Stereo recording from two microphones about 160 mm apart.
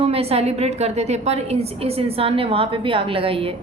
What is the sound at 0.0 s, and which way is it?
A woman's voice, 40° right (ahead or behind).